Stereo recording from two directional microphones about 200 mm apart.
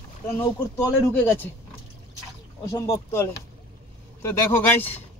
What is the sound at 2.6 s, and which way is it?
Speech, 15° left (ahead or behind).